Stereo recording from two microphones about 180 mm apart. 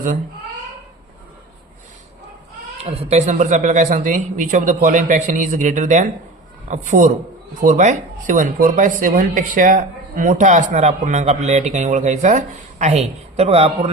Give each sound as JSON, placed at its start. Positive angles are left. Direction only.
{"t": 2.8, "sound": "speech", "side_deg": -35}